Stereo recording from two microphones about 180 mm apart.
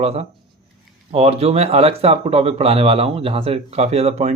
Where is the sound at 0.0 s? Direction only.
35° right (ahead or behind).